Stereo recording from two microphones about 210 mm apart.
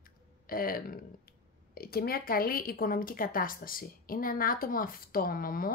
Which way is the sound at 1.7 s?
45° left (ahead or behind).